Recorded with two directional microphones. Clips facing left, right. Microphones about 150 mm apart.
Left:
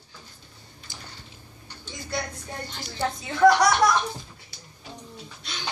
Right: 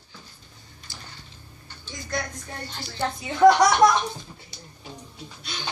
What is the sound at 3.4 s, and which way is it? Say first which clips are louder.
Speech: right 2 dB; 20° right (ahead or behind).